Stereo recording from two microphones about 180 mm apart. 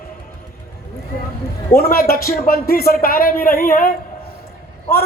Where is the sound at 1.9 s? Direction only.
55° left (ahead or behind).